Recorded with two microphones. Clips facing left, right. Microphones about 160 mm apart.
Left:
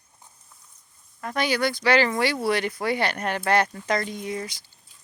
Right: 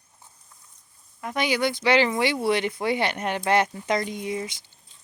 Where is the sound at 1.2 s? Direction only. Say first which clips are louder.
Even; 15° right (ahead or behind).